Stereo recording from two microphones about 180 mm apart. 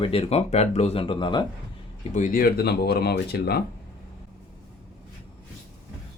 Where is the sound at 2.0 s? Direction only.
45° left (ahead or behind); by 3.6 s 60° left (ahead or behind).